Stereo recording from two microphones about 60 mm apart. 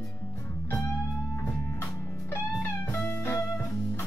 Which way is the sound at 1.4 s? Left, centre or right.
Left.